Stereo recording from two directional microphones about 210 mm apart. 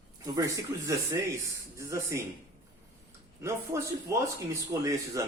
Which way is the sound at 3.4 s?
10° right (ahead or behind).